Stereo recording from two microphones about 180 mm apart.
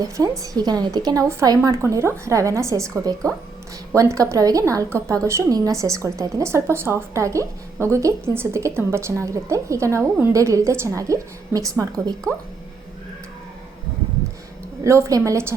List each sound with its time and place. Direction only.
0.0 s a woman's voice: 20° right (ahead or behind)
14.8 s a woman's voice: 15° right (ahead or behind)